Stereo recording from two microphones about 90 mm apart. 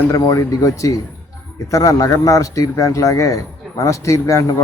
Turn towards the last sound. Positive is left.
turn(degrees=35)  # may be behind; listen again after turning